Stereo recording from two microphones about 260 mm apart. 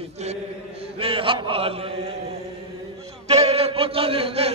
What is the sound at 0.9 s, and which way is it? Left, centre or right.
Speech, right.